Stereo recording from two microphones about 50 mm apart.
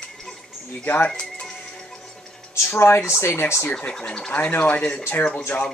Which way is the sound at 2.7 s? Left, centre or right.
Left.